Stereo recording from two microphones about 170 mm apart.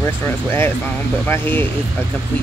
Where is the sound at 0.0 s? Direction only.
15° left (ahead or behind).